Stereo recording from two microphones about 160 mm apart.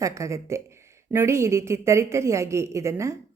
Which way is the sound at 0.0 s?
20° right (ahead or behind).